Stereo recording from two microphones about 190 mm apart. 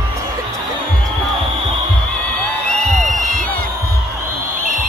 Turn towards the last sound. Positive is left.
turn(degrees=-45)  # may be behind; listen again after turning